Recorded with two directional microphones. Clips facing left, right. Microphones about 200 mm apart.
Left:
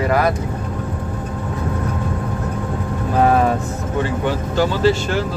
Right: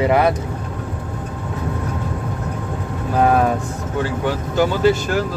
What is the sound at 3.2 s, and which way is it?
Speech, 5° right (ahead or behind).